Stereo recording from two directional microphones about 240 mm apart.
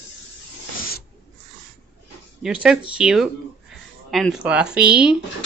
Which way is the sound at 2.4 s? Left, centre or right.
Centre.